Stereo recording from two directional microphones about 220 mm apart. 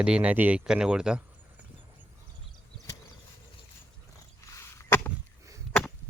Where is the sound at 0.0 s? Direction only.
5° right (ahead or behind).